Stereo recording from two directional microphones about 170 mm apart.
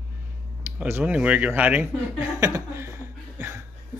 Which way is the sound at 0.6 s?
10° right (ahead or behind).